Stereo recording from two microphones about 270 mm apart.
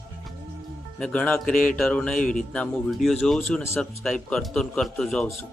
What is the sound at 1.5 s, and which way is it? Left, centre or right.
Speech, left.